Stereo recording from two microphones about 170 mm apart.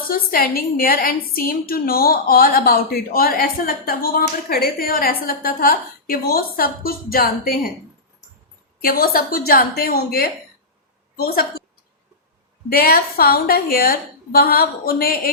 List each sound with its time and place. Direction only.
0.1 s a woman's voice: 60° left (ahead or behind)
8.8 s a woman's voice: 60° left (ahead or behind)
12.6 s a woman's voice: 60° left (ahead or behind)